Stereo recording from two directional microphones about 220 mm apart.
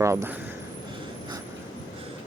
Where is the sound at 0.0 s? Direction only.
15° right (ahead or behind).